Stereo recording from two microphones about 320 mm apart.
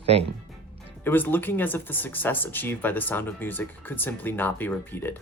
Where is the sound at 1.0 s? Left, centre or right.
Centre.